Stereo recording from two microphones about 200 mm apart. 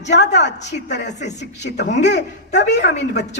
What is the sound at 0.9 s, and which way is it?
A man's voice, 60° left (ahead or behind).